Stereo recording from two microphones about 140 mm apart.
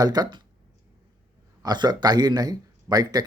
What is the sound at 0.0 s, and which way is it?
Speech, 30° right (ahead or behind).